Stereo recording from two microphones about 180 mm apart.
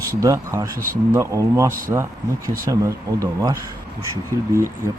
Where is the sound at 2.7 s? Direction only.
20° right (ahead or behind).